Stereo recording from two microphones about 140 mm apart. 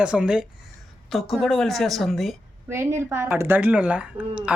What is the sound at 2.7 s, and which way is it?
Speech, 15° right (ahead or behind).